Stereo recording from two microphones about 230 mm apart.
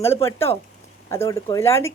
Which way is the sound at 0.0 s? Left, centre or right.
Centre.